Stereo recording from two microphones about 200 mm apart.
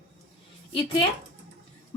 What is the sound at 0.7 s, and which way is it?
Speech, 25° left (ahead or behind).